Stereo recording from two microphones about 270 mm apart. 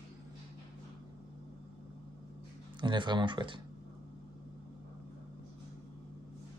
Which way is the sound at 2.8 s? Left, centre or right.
Centre.